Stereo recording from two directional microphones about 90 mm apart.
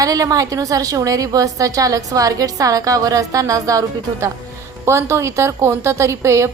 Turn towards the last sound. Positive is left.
turn(degrees=-30)  # may be behind; listen again after turning